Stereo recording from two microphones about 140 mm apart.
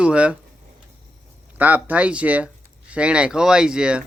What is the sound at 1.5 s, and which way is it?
Speech, 10° right (ahead or behind).